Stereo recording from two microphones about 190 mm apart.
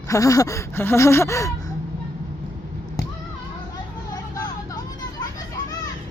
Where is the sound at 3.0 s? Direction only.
20° left (ahead or behind).